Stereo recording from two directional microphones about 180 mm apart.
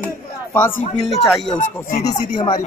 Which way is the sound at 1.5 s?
45° left (ahead or behind).